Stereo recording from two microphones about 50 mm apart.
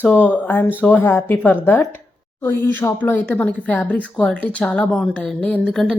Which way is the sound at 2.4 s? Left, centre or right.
Left.